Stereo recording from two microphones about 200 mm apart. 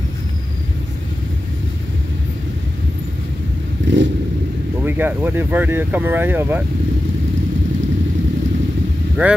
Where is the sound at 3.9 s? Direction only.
65° right (ahead or behind).